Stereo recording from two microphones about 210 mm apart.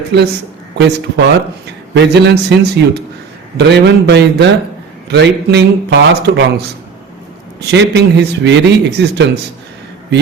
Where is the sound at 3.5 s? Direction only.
55° right (ahead or behind).